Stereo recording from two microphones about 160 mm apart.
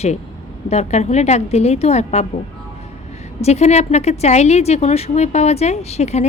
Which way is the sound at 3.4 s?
40° left (ahead or behind).